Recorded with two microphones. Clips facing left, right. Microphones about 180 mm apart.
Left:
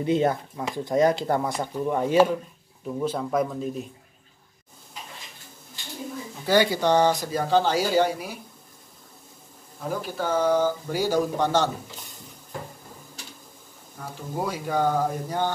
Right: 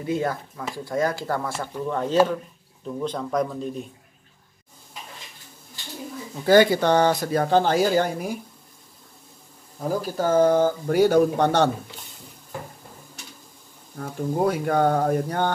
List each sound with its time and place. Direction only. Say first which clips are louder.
0.0 s speech: left 3 dB; 20° left (ahead or behind); by 3.9 s 5° left (ahead or behind)
6.4 s speech: right 5 dB; 55° right (ahead or behind)
9.8 s speech: right 4 dB; 40° right (ahead or behind); by 11.7 s 60° right (ahead or behind)
13.9 s speech: right 7 dB; 60° right (ahead or behind)